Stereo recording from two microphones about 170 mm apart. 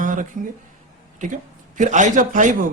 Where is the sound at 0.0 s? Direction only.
50° right (ahead or behind).